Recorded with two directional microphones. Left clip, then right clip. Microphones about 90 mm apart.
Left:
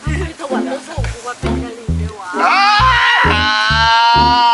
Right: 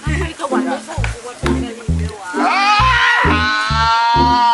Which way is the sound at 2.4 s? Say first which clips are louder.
Left 2 dB; 5° left (ahead or behind).